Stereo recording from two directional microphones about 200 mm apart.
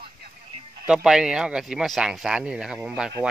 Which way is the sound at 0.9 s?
5° right (ahead or behind).